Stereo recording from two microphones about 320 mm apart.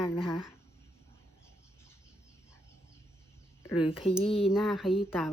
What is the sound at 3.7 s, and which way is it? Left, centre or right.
Speech, centre.